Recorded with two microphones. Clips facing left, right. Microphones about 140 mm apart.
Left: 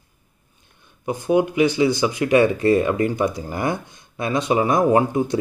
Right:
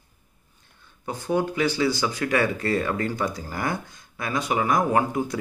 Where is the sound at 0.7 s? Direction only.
15° left (ahead or behind).